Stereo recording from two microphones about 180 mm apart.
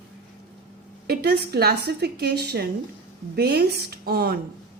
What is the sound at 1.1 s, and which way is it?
A woman's voice, 65° right (ahead or behind).